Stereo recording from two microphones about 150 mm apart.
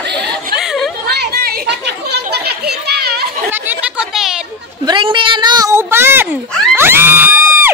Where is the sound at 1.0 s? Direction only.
90° right.